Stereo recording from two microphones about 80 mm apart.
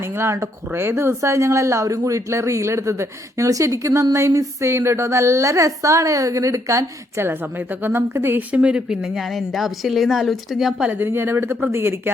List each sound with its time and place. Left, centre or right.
0.0 s a woman's voice: right
8.4 s speech: centre
10.8 s speech: right